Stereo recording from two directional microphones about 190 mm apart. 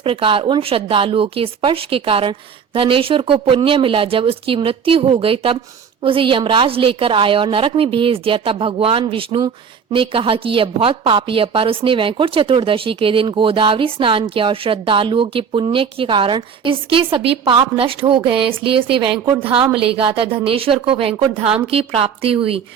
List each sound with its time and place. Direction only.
0.0 s a woman's voice: 30° right (ahead or behind)